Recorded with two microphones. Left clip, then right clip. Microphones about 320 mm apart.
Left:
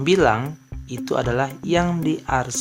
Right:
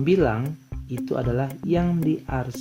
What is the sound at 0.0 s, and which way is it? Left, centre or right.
Speech, left.